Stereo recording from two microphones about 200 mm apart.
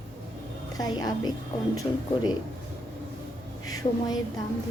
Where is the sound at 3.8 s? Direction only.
30° left (ahead or behind).